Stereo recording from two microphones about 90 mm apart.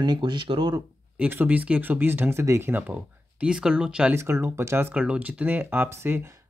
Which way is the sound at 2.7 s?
15° right (ahead or behind).